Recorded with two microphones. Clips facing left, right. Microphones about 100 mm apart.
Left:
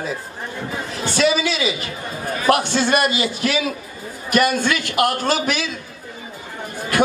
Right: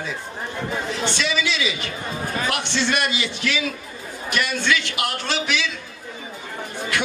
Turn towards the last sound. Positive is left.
turn(degrees=45)  # may be behind; listen again after turning